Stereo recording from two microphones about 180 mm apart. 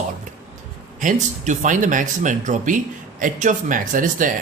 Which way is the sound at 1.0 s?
45° right (ahead or behind).